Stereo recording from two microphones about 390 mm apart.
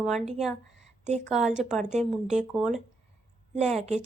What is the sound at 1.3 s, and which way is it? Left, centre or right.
A woman's voice, centre.